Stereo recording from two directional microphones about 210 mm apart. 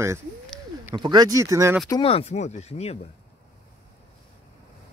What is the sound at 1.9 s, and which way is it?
Speech, 25° left (ahead or behind).